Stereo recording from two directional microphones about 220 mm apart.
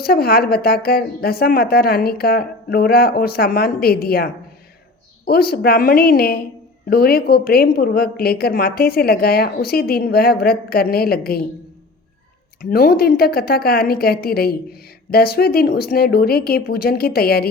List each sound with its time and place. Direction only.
0.0 s a woman's voice: 45° left (ahead or behind)
12.7 s a woman's voice: 45° left (ahead or behind)